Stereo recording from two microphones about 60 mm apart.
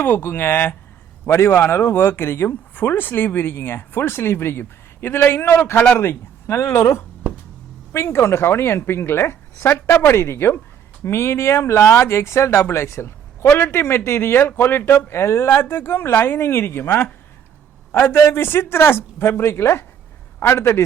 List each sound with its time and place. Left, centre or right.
0.0 s speech: left